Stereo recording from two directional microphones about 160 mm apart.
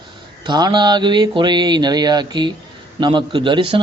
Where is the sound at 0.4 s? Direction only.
25° right (ahead or behind).